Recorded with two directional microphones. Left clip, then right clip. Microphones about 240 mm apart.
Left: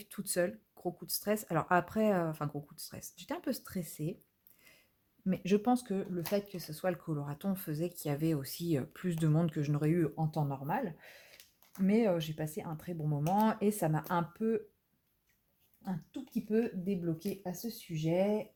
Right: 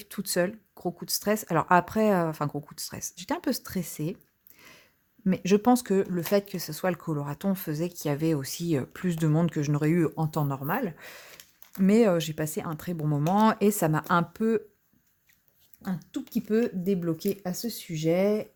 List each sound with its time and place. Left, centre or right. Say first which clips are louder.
0.0 s speech: right 6 dB; right
15.8 s speech: right 8 dB; right